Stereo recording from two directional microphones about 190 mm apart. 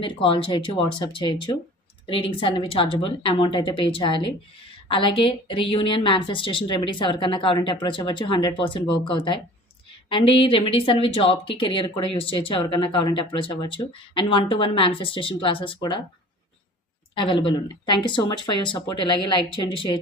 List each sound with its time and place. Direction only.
0.0 s speech: 25° left (ahead or behind)
17.2 s speech: 25° left (ahead or behind)